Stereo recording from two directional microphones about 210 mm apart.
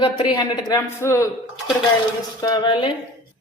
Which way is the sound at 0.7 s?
15° left (ahead or behind).